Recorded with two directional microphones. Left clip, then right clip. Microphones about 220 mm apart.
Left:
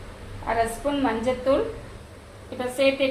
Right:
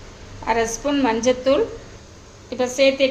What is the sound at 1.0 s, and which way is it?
Speech, 50° right (ahead or behind).